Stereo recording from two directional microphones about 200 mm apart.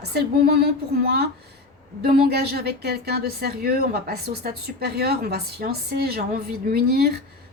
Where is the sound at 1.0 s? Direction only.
50° right (ahead or behind).